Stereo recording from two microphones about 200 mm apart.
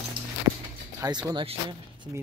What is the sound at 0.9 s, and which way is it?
Speech, 15° right (ahead or behind).